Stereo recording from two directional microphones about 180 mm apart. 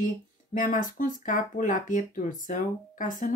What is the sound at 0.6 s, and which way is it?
Speech, 45° left (ahead or behind).